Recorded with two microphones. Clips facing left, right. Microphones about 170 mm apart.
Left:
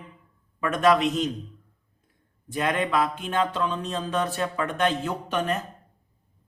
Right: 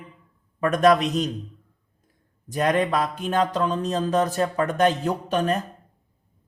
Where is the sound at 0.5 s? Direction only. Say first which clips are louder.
Right 3 dB; 40° right (ahead or behind).